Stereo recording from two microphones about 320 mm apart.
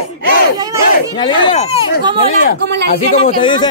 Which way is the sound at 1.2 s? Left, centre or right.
Centre.